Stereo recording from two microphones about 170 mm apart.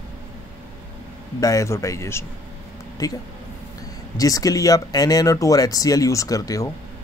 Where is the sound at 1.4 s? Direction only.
20° left (ahead or behind).